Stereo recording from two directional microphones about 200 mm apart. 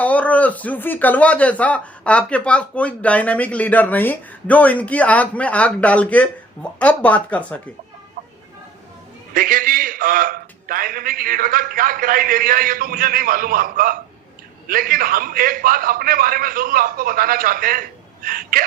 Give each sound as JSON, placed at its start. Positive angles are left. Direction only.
{"t": 0.0, "sound": "speech", "side_deg": 5}
{"t": 8.2, "sound": "vehicle", "side_deg": -35}
{"t": 9.3, "sound": "a man's voice", "side_deg": -45}